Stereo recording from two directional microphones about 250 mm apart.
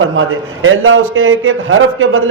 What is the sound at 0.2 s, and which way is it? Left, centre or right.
A man's voice, right.